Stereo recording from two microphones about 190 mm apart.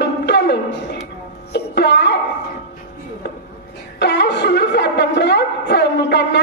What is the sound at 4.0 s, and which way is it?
Wind instrument, 65° left (ahead or behind).